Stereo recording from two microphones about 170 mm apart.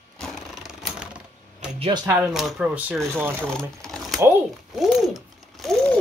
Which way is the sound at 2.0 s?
5° right (ahead or behind).